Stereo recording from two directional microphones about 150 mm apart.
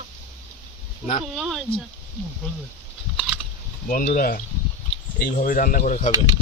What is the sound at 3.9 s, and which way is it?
Speech, 65° left (ahead or behind).